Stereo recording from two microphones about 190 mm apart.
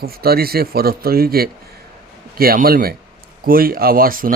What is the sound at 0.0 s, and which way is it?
Speech, 55° right (ahead or behind).